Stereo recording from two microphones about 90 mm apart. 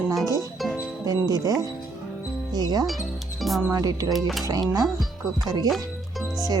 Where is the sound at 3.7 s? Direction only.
40° right (ahead or behind).